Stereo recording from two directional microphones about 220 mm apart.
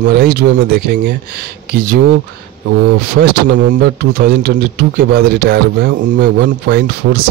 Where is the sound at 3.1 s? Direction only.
50° right (ahead or behind).